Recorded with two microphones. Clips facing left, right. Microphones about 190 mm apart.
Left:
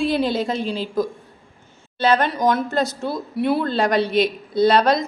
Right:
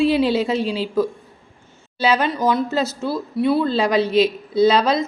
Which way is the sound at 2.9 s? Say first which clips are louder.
Right 2 dB; 15° left (ahead or behind).